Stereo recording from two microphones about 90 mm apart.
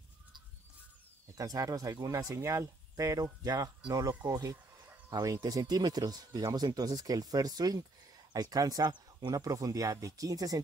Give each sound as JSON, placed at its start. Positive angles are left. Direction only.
{"t": 1.3, "sound": "speech", "side_deg": -40}
{"t": 9.4, "sound": "speech", "side_deg": -40}